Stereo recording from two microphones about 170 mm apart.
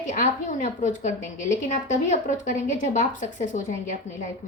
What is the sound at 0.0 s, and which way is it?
A woman's voice, 50° left (ahead or behind).